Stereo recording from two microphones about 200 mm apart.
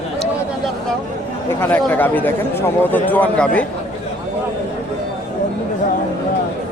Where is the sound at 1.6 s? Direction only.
10° left (ahead or behind).